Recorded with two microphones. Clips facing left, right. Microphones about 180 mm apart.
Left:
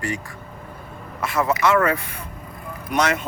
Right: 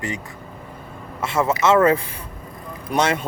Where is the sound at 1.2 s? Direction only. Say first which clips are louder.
Right 1 dB; 25° right (ahead or behind).